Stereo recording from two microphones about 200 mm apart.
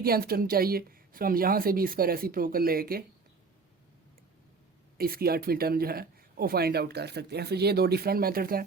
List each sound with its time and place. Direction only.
0.0 s speech: 50° right (ahead or behind)
4.9 s speech: 50° right (ahead or behind)